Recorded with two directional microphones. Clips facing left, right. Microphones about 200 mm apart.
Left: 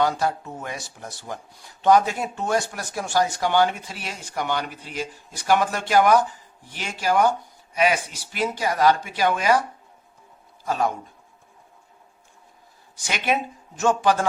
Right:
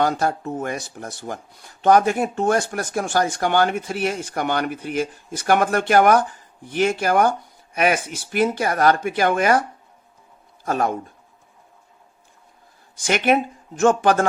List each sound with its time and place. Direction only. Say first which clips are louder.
0.0 s speech: right 2 dB; 50° right (ahead or behind)
10.7 s speech: right 2 dB; 55° right (ahead or behind)
13.1 s speech: right 6 dB; 55° right (ahead or behind)